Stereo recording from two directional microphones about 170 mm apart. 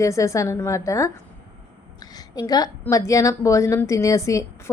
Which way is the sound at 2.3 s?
20° left (ahead or behind).